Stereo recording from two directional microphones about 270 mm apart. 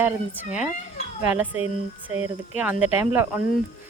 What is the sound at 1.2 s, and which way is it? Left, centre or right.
A woman's voice, centre.